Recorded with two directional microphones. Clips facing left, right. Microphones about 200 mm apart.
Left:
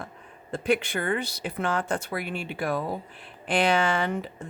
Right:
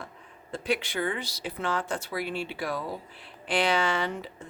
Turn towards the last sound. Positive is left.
turn(degrees=50)  # may be behind; listen again after turning